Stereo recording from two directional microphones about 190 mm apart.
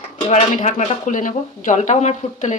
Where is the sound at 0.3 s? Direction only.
35° left (ahead or behind).